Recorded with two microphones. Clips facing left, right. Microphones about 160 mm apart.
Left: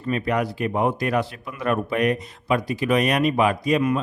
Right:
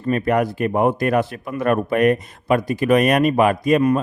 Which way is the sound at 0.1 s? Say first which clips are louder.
Right 5 dB; 50° right (ahead or behind).